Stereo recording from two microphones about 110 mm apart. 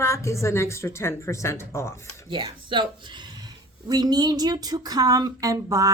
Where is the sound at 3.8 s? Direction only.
40° right (ahead or behind).